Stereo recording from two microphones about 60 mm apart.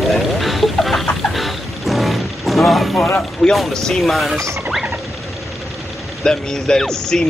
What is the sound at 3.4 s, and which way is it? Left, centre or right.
Speech, centre.